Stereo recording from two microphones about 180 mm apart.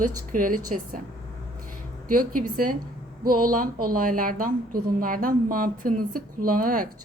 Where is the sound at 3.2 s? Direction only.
50° right (ahead or behind).